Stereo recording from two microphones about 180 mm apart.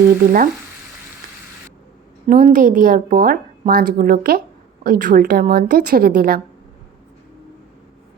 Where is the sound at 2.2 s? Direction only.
50° right (ahead or behind).